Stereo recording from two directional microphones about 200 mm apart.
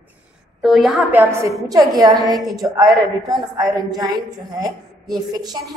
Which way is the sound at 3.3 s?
20° right (ahead or behind).